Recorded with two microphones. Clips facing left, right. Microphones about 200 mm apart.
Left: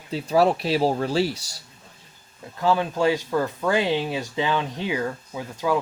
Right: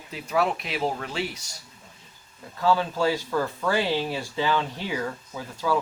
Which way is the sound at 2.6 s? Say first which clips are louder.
Left 2 dB; 20° left (ahead or behind).